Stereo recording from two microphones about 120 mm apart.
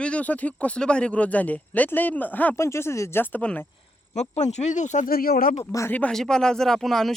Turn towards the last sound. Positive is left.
turn(degrees=0)  # may be behind; listen again after turning